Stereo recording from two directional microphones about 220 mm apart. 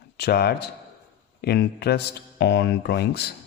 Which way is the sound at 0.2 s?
45° left (ahead or behind).